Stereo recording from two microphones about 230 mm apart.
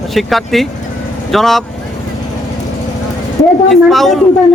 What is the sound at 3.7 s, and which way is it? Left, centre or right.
Speech, centre.